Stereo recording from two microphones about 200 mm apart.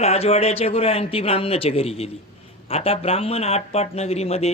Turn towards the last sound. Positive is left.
turn(degrees=30)  # may be behind; listen again after turning